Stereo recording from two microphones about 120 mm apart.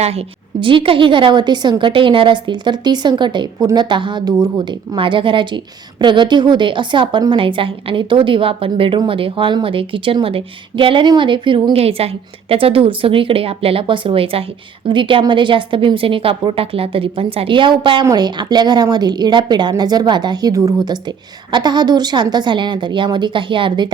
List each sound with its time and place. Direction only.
0.0 s a woman's voice: 60° right (ahead or behind); by 23.9 s 40° right (ahead or behind)